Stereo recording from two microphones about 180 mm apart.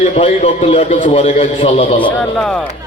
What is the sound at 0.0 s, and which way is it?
A man's voice, 35° left (ahead or behind).